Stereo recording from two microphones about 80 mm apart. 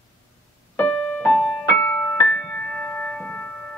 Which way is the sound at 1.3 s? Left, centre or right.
Centre.